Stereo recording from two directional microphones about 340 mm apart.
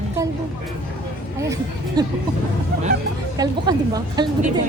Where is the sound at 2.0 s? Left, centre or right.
Centre.